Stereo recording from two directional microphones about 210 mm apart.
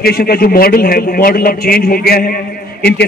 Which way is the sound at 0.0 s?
50° left (ahead or behind).